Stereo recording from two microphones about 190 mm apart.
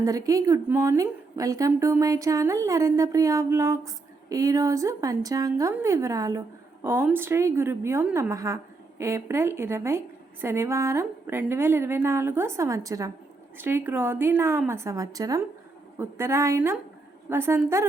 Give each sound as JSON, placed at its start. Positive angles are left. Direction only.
{"t": 0.0, "sound": "a woman's voice", "side_deg": -15}